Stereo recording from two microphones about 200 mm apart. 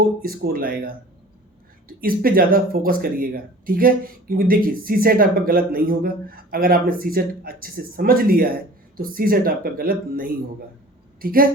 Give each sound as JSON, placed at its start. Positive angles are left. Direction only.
{"t": 0.2, "sound": "a woman's voice", "side_deg": -45}